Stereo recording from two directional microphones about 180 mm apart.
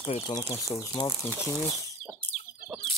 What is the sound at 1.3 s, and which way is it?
Speech, centre (ahead or behind).